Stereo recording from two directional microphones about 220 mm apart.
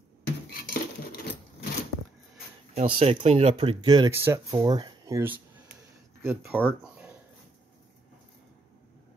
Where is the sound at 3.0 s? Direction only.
25° right (ahead or behind); by 7.1 s 5° right (ahead or behind).